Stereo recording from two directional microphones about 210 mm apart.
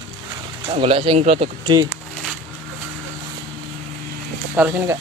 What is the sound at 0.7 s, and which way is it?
Speech, 25° right (ahead or behind).